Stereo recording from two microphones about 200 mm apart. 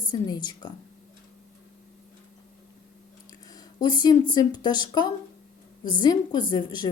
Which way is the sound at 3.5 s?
20° left (ahead or behind).